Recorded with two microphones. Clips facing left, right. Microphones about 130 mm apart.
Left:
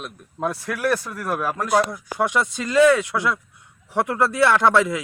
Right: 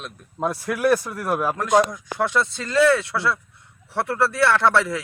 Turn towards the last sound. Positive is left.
turn(degrees=15)  # may be behind; listen again after turning